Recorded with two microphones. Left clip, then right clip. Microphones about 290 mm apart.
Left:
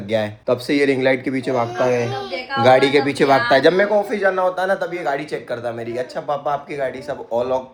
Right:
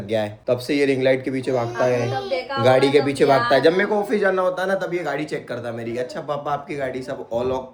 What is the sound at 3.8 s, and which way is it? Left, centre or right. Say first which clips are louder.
Speech: left 4 dB; centre.